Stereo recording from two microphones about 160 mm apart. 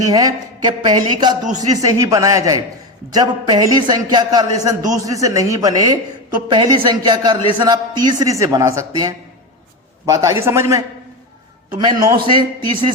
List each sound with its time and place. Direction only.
0.0 s a woman's voice: 25° right (ahead or behind)